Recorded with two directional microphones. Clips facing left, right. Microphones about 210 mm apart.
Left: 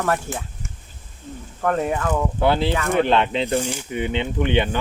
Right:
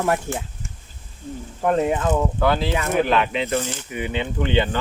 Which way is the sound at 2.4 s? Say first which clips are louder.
Left 1 dB; 30° left (ahead or behind).